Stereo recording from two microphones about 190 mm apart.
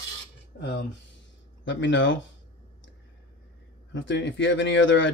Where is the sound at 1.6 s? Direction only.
70° left (ahead or behind).